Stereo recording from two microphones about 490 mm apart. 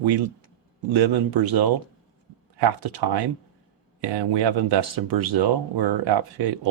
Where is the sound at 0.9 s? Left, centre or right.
Right.